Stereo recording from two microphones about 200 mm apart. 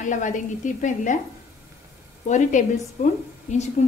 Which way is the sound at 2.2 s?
35° left (ahead or behind).